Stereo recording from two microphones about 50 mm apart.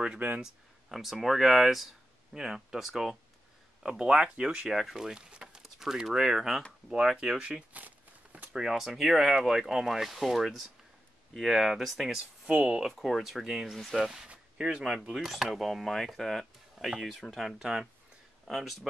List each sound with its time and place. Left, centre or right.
0.4 s speech: centre
7.7 s a sound: right
8.5 s speech: centre
12.4 s speech: right
12.9 s speech: centre
14.2 s speech: centre
17.6 s speech: centre
18.5 s speech: centre